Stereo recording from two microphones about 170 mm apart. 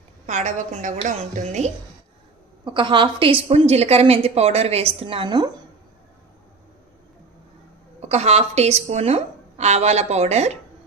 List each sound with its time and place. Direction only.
0.3 s a woman's voice: 45° right (ahead or behind)
2.6 s a woman's voice: 30° right (ahead or behind)
8.0 s a woman's voice: 40° right (ahead or behind)